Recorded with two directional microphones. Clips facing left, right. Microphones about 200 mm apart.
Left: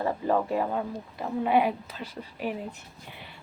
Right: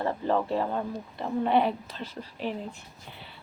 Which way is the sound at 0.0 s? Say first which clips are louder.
Left 1 dB; 10° left (ahead or behind).